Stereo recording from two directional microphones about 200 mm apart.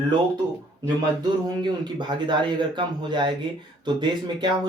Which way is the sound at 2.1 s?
20° right (ahead or behind).